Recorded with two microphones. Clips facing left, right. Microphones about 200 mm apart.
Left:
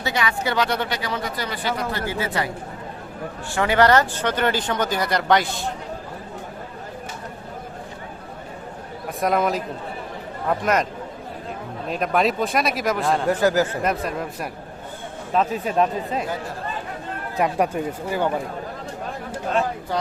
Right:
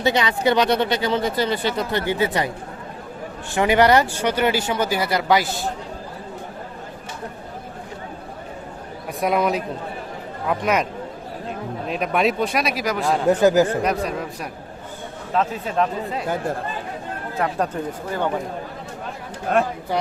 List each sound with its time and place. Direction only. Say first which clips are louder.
0.0 s speech: right 5 dB; 20° right (ahead or behind)
3.5 s speech: right 2 dB; 15° right (ahead or behind)
9.2 s speech: right 1 dB; centre (ahead or behind)
11.9 s speech: even; centre (ahead or behind)
13.2 s speech: right 5 dB; 20° right (ahead or behind)
13.8 s speech: right 1 dB; centre (ahead or behind)
15.4 s speech: left 1 dB; 15° left (ahead or behind)
17.3 s speech: left 2 dB; 15° left (ahead or behind)